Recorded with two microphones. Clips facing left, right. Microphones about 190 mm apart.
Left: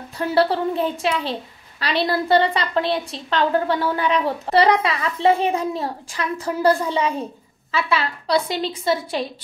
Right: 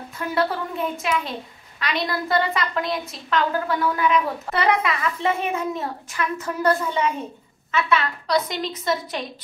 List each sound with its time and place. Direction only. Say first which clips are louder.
0.2 s a woman's voice: left 5 dB; 30° left (ahead or behind)